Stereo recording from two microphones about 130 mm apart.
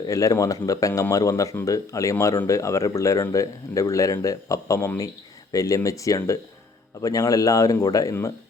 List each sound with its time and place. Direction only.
0.0 s speech: 25° left (ahead or behind)